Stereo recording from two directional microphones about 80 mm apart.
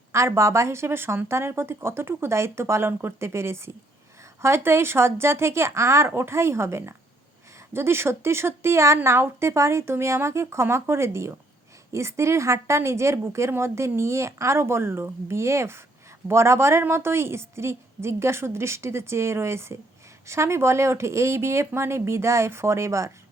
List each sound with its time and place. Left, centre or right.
0.1 s a woman's voice: right